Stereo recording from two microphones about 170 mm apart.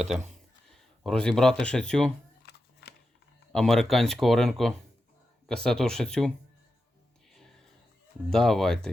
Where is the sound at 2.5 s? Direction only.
70° left (ahead or behind).